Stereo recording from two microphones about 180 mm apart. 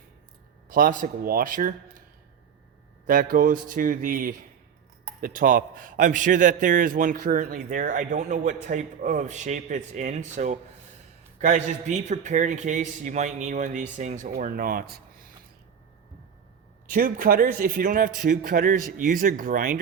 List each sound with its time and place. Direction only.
0.7 s a man's voice: 50° right (ahead or behind)
3.1 s a man's voice: 50° right (ahead or behind)
16.9 s a man's voice: 50° right (ahead or behind)